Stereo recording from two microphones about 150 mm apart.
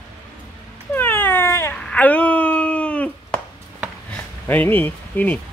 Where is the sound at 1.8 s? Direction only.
10° left (ahead or behind).